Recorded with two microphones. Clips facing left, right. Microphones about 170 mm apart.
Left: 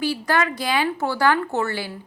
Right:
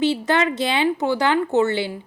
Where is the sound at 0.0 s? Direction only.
25° right (ahead or behind).